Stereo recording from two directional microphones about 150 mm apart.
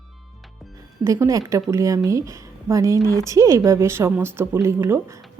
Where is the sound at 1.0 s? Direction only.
20° right (ahead or behind).